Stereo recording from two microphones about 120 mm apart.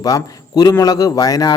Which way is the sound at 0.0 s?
30° left (ahead or behind).